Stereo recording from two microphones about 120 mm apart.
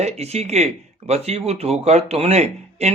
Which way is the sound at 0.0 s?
60° right (ahead or behind).